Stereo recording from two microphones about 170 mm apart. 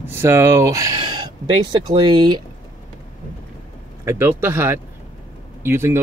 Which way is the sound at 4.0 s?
15° right (ahead or behind).